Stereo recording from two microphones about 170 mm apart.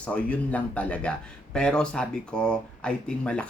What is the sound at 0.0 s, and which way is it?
Speech, 10° left (ahead or behind).